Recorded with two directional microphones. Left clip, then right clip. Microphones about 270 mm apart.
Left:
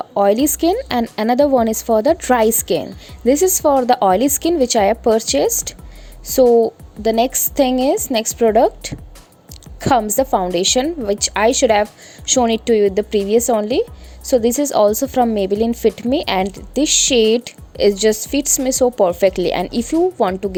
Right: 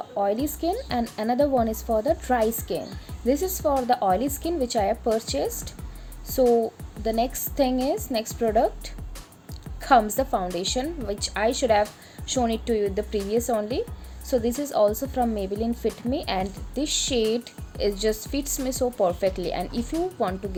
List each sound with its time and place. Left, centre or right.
0.2 s speech: left